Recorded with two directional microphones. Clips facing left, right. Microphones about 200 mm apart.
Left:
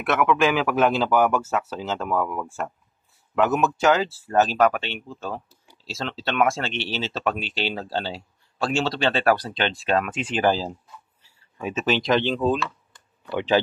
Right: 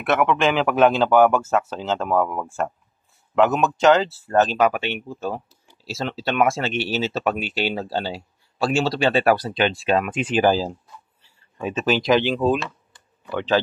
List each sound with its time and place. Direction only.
0.0 s speech: centre (ahead or behind)
3.3 s speech: 5° left (ahead or behind)
4.6 s speech: 5° right (ahead or behind)
11.2 s a sound: 10° left (ahead or behind)
11.9 s speech: 5° right (ahead or behind)
12.4 s speech: 15° right (ahead or behind)
13.3 s speech: 10° left (ahead or behind)